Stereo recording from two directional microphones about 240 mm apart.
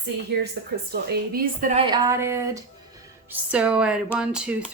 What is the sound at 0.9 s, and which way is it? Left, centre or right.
Speech, right.